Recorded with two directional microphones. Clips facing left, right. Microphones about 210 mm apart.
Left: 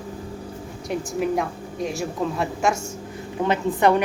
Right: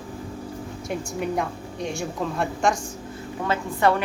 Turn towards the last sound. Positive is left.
turn(degrees=20)  # may be behind; listen again after turning